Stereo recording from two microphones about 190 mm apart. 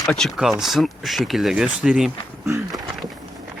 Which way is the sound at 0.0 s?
Centre (ahead or behind).